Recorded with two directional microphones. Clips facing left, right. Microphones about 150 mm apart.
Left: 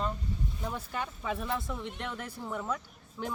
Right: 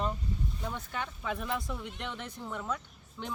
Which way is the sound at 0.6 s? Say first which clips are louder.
Left 2 dB; 5° left (ahead or behind).